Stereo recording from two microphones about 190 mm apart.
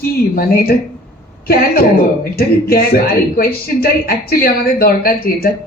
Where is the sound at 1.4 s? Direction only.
50° left (ahead or behind).